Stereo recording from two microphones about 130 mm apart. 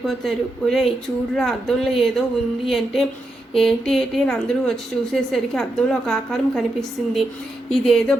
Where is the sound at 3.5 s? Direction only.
Centre (ahead or behind).